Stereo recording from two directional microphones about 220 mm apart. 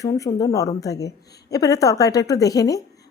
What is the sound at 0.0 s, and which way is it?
Speech, 15° left (ahead or behind).